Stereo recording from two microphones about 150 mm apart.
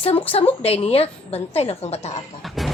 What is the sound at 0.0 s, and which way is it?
A woman's voice, 40° left (ahead or behind).